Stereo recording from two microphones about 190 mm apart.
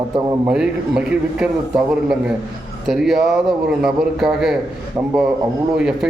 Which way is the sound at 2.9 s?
Centre (ahead or behind).